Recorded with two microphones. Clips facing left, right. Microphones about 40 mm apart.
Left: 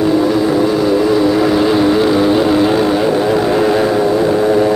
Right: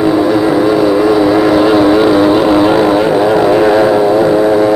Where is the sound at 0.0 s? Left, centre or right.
Centre.